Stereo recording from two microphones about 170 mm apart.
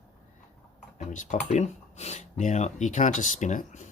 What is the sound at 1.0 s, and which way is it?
Speech, 45° left (ahead or behind).